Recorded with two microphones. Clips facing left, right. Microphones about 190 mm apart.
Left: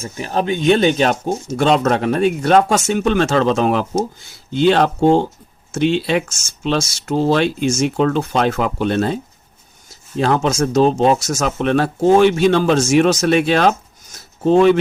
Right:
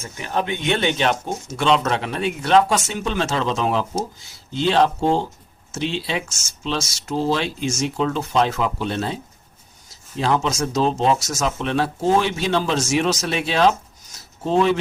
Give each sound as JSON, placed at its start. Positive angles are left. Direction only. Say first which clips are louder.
{"t": 0.0, "sound": "speech", "louder": "left 4 dB", "side_deg": 35}
{"t": 10.2, "sound": "speech", "louder": "left 5 dB", "side_deg": 55}